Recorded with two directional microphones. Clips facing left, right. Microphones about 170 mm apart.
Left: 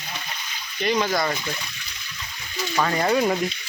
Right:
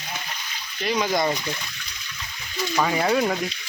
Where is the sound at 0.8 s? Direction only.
5° right (ahead or behind).